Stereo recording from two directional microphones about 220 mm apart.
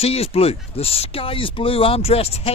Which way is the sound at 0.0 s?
25° left (ahead or behind).